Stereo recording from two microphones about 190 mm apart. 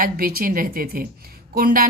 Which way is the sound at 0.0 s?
50° right (ahead or behind).